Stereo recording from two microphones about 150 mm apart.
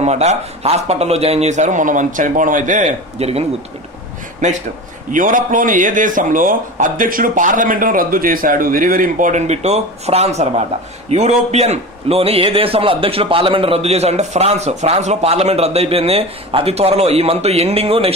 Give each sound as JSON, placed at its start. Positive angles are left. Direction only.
{"t": 0.0, "sound": "a man's voice", "side_deg": -45}
{"t": 5.1, "sound": "a man's voice", "side_deg": -60}